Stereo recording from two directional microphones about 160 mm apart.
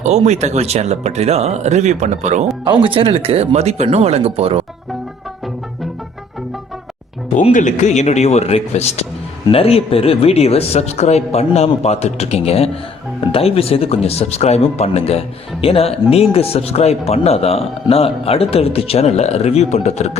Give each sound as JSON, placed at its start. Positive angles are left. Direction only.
{"t": 0.0, "sound": "speech", "side_deg": -45}
{"t": 2.6, "sound": "speech", "side_deg": -35}
{"t": 7.3, "sound": "a man's voice", "side_deg": 50}